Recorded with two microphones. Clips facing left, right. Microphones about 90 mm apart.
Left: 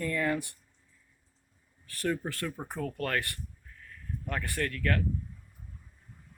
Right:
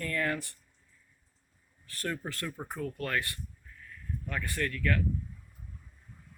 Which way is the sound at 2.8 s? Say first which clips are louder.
Left 2 dB; 50° left (ahead or behind).